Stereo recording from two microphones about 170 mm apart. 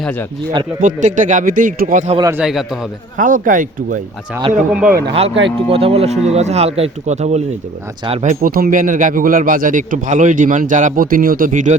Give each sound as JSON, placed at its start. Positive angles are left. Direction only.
{"t": 0.0, "sound": "a man's voice", "side_deg": 10}
{"t": 0.8, "sound": "a man's voice", "side_deg": -50}
{"t": 2.3, "sound": "a man's voice", "side_deg": -5}
{"t": 3.2, "sound": "a man's voice", "side_deg": -50}
{"t": 4.9, "sound": "speech", "side_deg": -65}
{"t": 5.3, "sound": "speech", "side_deg": -90}
{"t": 5.6, "sound": "speech", "side_deg": -35}
{"t": 8.4, "sound": "a man's voice", "side_deg": -60}